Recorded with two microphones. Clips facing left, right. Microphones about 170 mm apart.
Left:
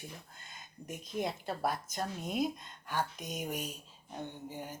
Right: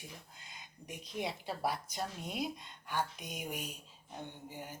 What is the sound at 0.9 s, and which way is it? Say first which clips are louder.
Speech: left 3 dB; 45° left (ahead or behind).